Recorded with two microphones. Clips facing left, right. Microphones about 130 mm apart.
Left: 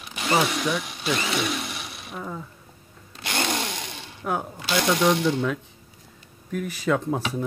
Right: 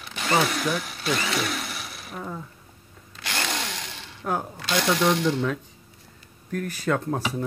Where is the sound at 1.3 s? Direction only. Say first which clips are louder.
Left 1 dB; centre (ahead or behind).